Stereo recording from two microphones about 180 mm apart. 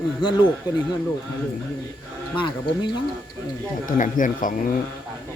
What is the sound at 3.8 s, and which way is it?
Speech, 45° left (ahead or behind).